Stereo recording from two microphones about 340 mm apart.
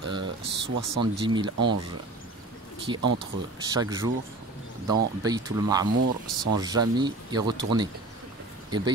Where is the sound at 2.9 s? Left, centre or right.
Centre.